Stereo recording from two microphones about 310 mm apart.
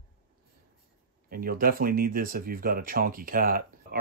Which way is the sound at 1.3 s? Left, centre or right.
Right.